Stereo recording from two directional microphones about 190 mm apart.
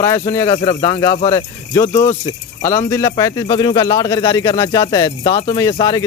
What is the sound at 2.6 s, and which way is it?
Speech, 15° left (ahead or behind).